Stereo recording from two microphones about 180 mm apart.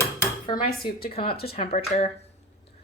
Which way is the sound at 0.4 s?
25° left (ahead or behind).